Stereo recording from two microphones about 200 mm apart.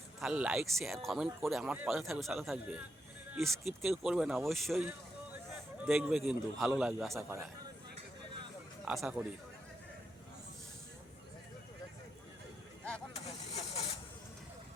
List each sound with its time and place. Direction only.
0.2 s speech: 5° right (ahead or behind)
7.2 s a man's voice: 15° right (ahead or behind)
8.8 s speech: 5° right (ahead or behind)
13.1 s vehicle: 30° left (ahead or behind)